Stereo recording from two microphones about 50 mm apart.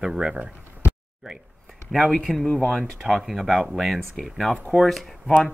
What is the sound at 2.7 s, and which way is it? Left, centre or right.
Speech, centre.